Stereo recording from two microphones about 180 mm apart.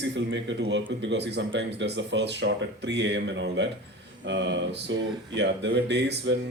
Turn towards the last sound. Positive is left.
turn(degrees=-75)  # may be behind; listen again after turning